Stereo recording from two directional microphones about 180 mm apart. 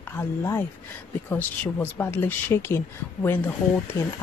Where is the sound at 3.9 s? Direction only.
15° left (ahead or behind).